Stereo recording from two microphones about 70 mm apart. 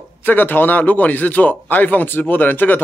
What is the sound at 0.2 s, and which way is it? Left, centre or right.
A man's voice, left.